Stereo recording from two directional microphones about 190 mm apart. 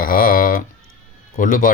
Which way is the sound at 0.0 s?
45° left (ahead or behind).